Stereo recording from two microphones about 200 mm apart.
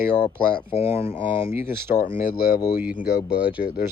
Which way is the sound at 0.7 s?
30° left (ahead or behind).